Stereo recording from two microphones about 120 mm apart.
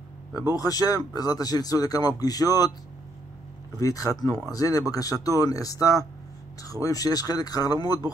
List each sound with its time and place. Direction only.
0.6 s speech: 30° left (ahead or behind)
3.8 s speech: 30° left (ahead or behind)